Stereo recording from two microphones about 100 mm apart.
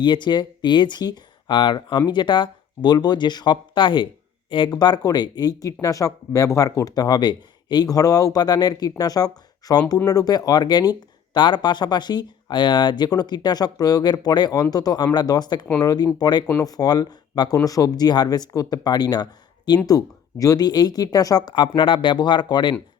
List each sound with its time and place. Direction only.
0.0 s speech: 50° left (ahead or behind)
4.7 s speech: 45° left (ahead or behind)